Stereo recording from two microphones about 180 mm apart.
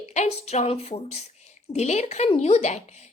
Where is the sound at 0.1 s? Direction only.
40° left (ahead or behind).